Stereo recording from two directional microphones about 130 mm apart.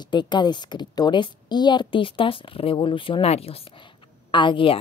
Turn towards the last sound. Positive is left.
turn(degrees=40)  # may be behind; listen again after turning